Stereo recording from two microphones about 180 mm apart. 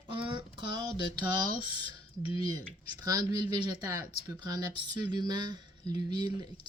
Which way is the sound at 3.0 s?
20° right (ahead or behind).